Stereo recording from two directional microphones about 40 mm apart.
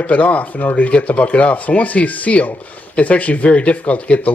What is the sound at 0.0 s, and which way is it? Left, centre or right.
Speech, left.